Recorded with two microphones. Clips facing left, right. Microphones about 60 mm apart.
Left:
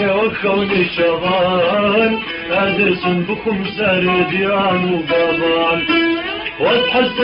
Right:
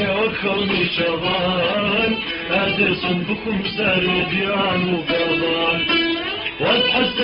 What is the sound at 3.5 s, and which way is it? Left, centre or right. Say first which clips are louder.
Carnatic music: left 3 dB; centre.